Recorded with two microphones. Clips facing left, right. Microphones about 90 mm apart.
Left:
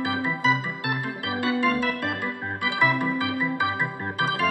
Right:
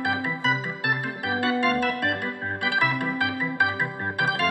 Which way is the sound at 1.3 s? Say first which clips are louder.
Even; 15° right (ahead or behind).